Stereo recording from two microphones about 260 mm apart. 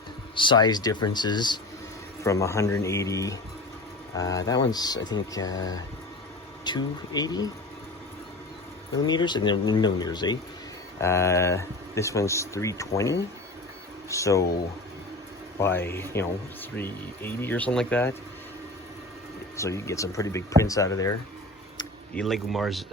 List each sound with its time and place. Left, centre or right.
0.3 s speech: centre
9.0 s speech: centre
15.6 s speech: centre
19.5 s speech: centre
22.1 s speech: centre